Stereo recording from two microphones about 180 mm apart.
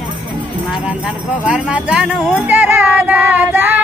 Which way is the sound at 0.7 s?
5° right (ahead or behind).